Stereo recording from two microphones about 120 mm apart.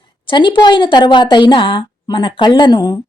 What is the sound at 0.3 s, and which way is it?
A woman's voice, 40° left (ahead or behind).